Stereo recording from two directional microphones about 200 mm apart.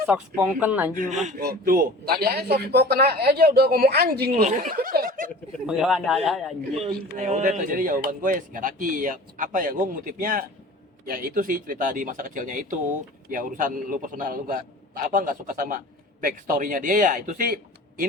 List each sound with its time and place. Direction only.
0.0 s speech: 5° right (ahead or behind)
0.9 s speech: 40° right (ahead or behind)
4.4 s speech: 40° right (ahead or behind)
5.5 s speech: 5° right (ahead or behind)
6.9 s speech: 50° right (ahead or behind)
7.3 s speech: 35° right (ahead or behind)